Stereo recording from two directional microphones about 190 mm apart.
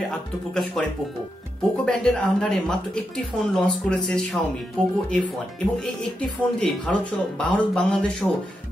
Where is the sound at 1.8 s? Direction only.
5° left (ahead or behind).